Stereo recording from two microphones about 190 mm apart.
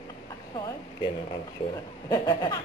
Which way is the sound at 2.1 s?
20° left (ahead or behind).